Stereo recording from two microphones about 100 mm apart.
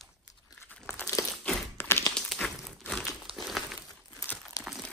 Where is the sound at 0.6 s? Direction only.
20° left (ahead or behind).